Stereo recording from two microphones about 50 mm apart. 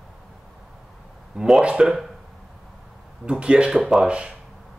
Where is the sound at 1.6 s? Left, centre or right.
Centre.